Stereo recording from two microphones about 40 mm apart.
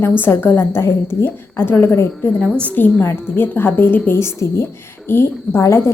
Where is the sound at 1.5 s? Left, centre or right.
Left.